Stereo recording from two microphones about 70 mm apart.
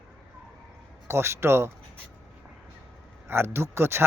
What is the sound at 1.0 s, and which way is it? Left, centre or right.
Speech, right.